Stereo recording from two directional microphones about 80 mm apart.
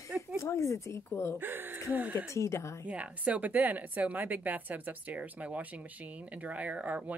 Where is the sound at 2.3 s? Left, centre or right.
Left.